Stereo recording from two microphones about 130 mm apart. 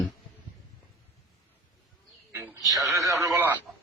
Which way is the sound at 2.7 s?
25° right (ahead or behind).